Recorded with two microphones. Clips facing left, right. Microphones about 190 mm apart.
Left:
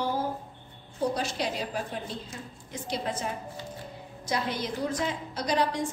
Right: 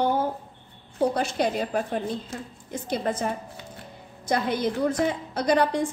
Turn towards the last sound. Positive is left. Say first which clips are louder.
# right 5 dB
turn(degrees=-55)  # may be behind; listen again after turning